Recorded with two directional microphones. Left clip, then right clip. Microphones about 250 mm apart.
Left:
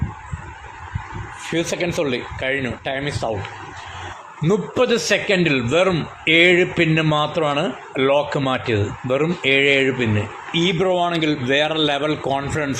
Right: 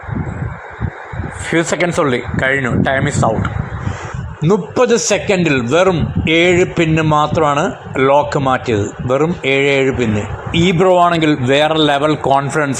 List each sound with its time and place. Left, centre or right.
1.5 s a man's voice: centre
4.4 s a man's voice: centre